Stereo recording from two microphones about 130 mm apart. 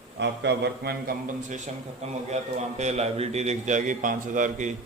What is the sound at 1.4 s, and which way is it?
Speech, 70° right (ahead or behind).